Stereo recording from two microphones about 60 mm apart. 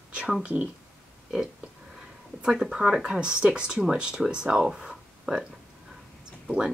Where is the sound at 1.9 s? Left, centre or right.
Centre.